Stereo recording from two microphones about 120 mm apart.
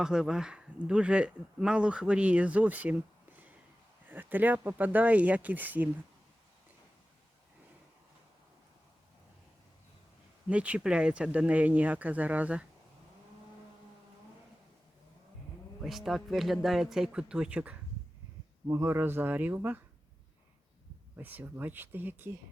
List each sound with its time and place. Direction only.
0.0 s speech: 5° right (ahead or behind)
10.5 s speech: 10° right (ahead or behind)
15.8 s speech: centre (ahead or behind)
18.7 s speech: 20° right (ahead or behind)
21.2 s speech: 15° right (ahead or behind)